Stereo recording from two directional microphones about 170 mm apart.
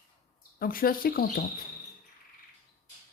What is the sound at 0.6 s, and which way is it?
Speech, 60° left (ahead or behind).